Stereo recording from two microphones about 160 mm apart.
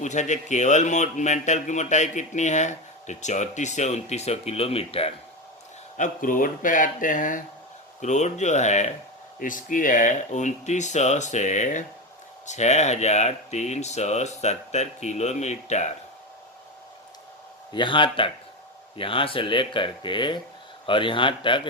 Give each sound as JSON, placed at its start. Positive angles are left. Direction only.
{"t": 0.0, "sound": "speech", "side_deg": 50}
{"t": 6.0, "sound": "speech", "side_deg": 55}
{"t": 17.7, "sound": "speech", "side_deg": 30}